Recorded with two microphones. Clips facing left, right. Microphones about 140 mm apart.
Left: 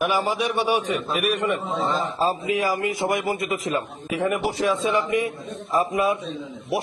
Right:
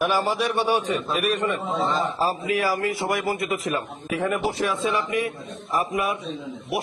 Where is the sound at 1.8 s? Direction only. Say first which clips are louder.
Right 2 dB; centre (ahead or behind).